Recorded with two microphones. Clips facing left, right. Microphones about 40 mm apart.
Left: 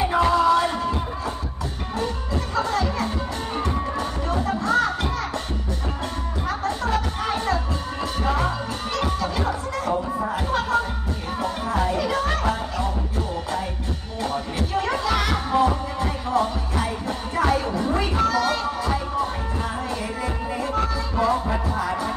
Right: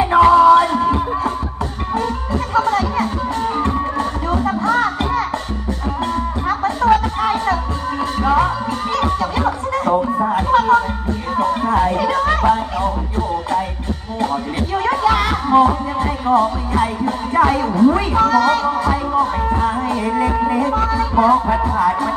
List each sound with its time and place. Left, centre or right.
0.0 s music: right
2.5 s music: right
6.6 s music: right
8.9 s music: right
14.2 s music: right